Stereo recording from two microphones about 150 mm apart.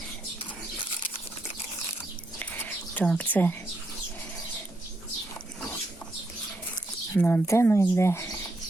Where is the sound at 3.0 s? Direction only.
10° left (ahead or behind).